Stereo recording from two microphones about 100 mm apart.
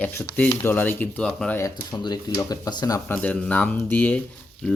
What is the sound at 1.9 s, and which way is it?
Speech, 45° left (ahead or behind).